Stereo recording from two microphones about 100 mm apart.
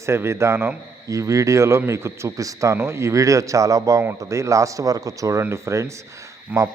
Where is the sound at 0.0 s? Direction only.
25° right (ahead or behind).